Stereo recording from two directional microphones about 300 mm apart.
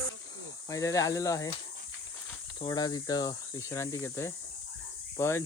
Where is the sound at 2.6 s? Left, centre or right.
Centre.